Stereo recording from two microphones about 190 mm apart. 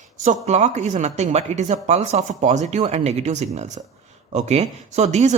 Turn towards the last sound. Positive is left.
turn(degrees=-35)  # may be behind; listen again after turning